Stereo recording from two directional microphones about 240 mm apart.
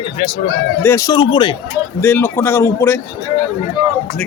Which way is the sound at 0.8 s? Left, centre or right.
Centre.